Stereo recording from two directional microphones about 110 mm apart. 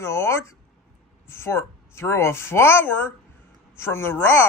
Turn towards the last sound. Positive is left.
turn(degrees=20)  # may be behind; listen again after turning